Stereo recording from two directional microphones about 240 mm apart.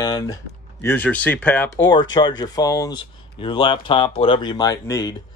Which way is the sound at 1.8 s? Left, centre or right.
Centre.